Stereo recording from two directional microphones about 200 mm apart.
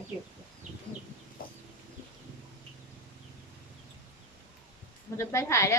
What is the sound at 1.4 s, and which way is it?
Chicken, 45° left (ahead or behind).